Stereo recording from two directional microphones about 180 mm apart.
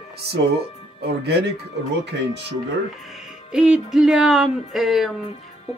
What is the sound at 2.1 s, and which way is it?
Speech, 75° right (ahead or behind).